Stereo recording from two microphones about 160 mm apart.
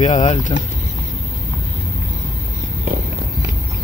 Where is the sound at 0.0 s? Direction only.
45° left (ahead or behind).